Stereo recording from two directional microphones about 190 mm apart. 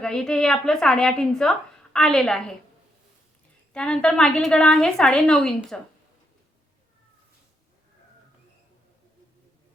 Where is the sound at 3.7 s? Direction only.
5° left (ahead or behind).